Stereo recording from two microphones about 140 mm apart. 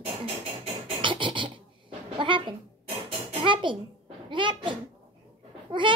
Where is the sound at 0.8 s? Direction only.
35° right (ahead or behind).